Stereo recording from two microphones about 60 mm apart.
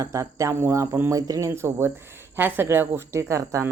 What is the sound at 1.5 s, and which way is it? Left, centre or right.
A woman's voice, right.